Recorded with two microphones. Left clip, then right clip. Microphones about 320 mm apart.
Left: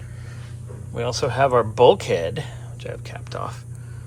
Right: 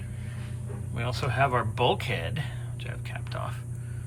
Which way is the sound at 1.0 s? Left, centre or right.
Centre.